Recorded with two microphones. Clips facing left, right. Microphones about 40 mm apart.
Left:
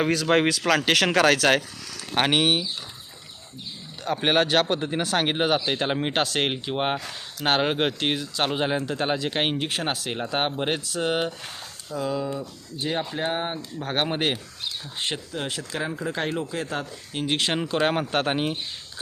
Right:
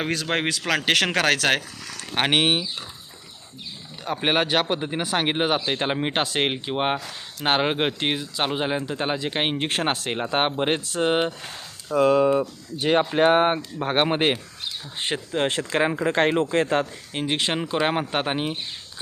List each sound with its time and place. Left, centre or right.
0.0 s speech: right
4.0 s speech: centre
9.6 s speech: right
10.1 s speech: right
11.9 s speech: right
13.8 s speech: right
15.4 s speech: right
17.2 s speech: centre